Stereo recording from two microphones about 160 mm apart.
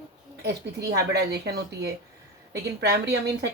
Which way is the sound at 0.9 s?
90° right.